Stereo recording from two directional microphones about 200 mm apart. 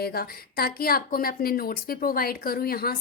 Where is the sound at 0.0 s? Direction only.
50° left (ahead or behind).